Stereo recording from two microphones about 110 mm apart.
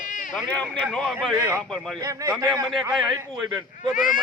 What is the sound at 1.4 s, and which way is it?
Speech, 25° right (ahead or behind).